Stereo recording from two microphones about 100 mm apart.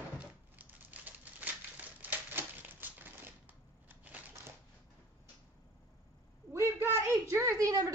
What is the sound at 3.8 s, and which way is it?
Crushing, 15° right (ahead or behind).